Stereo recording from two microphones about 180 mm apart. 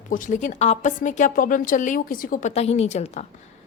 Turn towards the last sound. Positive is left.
turn(degrees=40)  # may be behind; listen again after turning